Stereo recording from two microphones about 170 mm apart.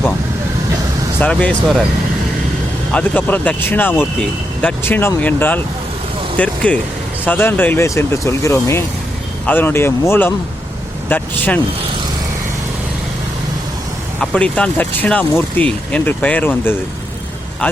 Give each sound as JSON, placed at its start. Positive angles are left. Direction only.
{"t": 1.2, "sound": "speech", "side_deg": 5}
{"t": 2.9, "sound": "speech", "side_deg": 10}
{"t": 14.2, "sound": "speech", "side_deg": 5}